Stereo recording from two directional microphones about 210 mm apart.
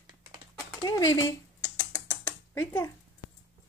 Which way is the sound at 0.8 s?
15° left (ahead or behind).